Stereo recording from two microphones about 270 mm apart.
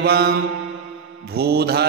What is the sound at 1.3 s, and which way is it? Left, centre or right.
Mantra, right.